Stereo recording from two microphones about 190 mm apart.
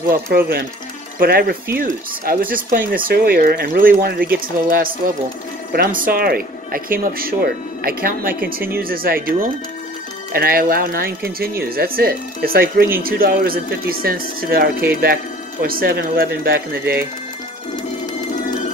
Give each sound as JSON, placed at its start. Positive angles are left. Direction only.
{"t": 0.3, "sound": "speech", "side_deg": -50}